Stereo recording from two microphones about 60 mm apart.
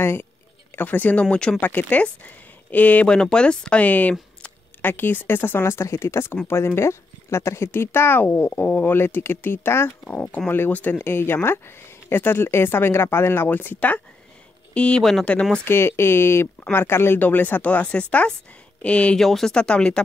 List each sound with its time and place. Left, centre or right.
0.0 s speech: left
0.7 s speech: left
1.3 s speech: centre
1.6 s speech: left
3.1 s speech: centre
4.8 s speech: left
10.0 s speech: left
15.6 s speech: left; by 19.1 s centre
19.1 s speech: centre